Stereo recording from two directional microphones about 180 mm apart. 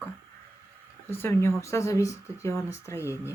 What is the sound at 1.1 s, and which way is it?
Speech, 15° left (ahead or behind).